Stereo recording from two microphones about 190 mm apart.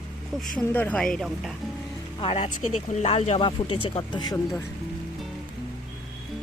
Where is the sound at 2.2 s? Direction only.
30° left (ahead or behind).